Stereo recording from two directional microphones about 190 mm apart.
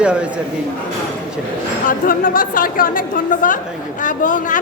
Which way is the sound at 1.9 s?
45° left (ahead or behind).